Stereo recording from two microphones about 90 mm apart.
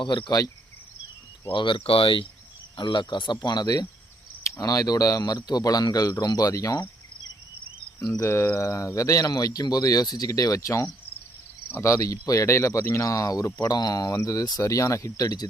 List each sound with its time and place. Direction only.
0.0 s speech: 65° left (ahead or behind)
1.5 s speech: 65° left (ahead or behind)
2.7 s speech: 60° left (ahead or behind)
4.4 s speech: 35° left (ahead or behind)
8.0 s speech: 35° left (ahead or behind)